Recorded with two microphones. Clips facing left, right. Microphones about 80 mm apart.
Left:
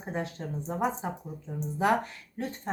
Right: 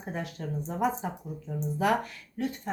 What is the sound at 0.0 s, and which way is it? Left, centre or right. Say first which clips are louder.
Speech: left 1 dB; left.